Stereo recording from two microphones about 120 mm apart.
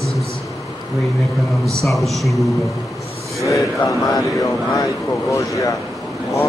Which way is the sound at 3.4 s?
30° left (ahead or behind).